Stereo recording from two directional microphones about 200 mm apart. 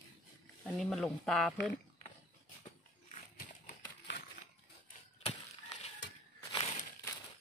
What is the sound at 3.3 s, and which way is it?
Typewriter, 45° left (ahead or behind).